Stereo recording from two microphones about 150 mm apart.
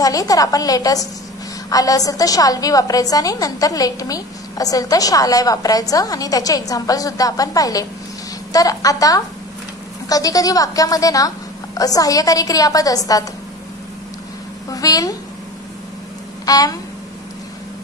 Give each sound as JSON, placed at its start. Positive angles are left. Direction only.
{"t": 0.0, "sound": "a woman's voice", "side_deg": 25}
{"t": 14.7, "sound": "a woman's voice", "side_deg": 25}
{"t": 16.4, "sound": "a sound", "side_deg": 25}